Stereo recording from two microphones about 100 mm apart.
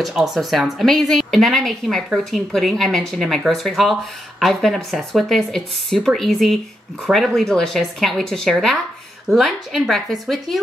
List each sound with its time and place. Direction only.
0.0 s speech: centre (ahead or behind)